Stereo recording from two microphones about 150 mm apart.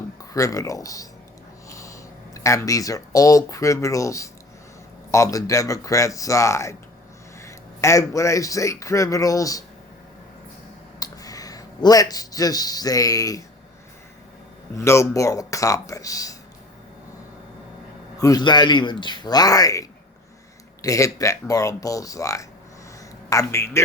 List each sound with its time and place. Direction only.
0.2 s speech: 20° left (ahead or behind)
11.0 s speech: 25° left (ahead or behind)
14.8 s speech: 20° left (ahead or behind)
18.2 s speech: 25° left (ahead or behind)